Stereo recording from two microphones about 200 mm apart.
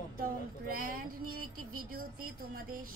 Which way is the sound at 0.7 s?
45° right (ahead or behind).